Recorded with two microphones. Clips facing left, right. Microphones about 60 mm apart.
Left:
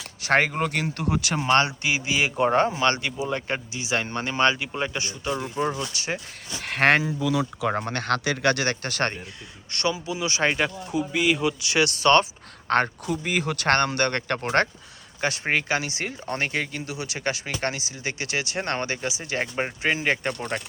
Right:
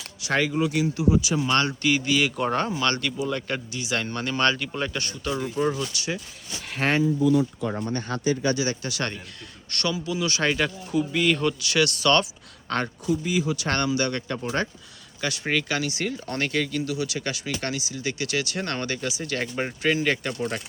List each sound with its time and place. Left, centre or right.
0.2 s speech: left
1.4 s speech: left; by 5.7 s centre
6.1 s speech: left
9.7 s speech: left
11.6 s speech: left
12.6 s speech: left
15.2 s speech: left